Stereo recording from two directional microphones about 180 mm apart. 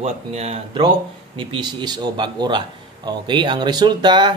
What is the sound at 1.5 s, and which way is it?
Speech, 25° right (ahead or behind).